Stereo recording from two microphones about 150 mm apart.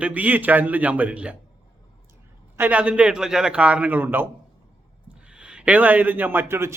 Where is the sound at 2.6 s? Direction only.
10° right (ahead or behind).